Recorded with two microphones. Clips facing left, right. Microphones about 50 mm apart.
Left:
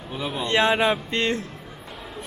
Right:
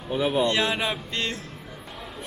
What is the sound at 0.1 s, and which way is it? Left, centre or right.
Speech, centre.